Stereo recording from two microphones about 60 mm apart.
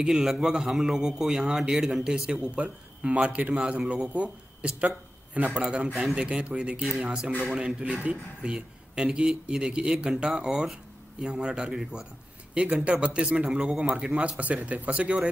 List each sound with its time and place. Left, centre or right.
0.0 s a man's voice: centre
2.3 s a man's voice: right
12.5 s a man's voice: right